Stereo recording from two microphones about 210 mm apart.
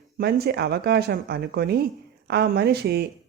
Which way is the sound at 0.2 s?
50° right (ahead or behind).